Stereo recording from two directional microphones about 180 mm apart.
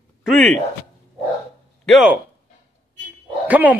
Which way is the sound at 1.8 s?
5° right (ahead or behind).